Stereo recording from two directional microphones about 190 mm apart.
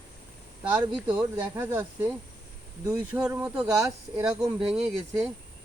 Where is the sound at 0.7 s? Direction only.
5° right (ahead or behind).